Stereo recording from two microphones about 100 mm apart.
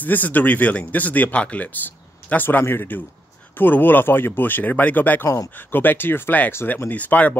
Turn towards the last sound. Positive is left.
turn(degrees=15)  # may be behind; listen again after turning